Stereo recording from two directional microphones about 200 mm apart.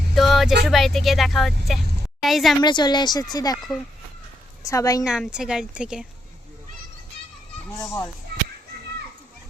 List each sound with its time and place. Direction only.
0.1 s a sound: centre (ahead or behind)
0.6 s speech: centre (ahead or behind)
2.6 s speech: 20° left (ahead or behind)
4.6 s a woman's voice: 15° left (ahead or behind)
5.0 s speech: 5° right (ahead or behind)
7.8 s a woman's voice: 15° left (ahead or behind)